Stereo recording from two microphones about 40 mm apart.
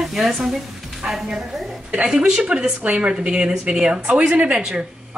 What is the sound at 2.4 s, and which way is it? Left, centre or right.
A woman's voice, right.